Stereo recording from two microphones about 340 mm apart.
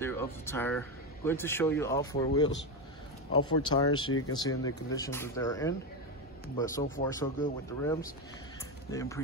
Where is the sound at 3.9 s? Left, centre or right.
Left.